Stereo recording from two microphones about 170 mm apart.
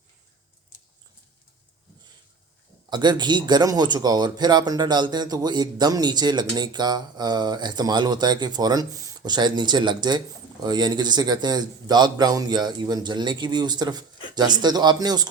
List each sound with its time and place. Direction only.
2.9 s speech: 25° right (ahead or behind)